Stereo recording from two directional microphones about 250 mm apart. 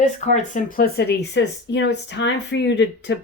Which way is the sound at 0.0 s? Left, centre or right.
Left.